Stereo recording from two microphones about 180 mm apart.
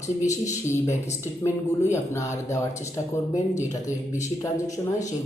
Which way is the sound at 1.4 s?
15° left (ahead or behind).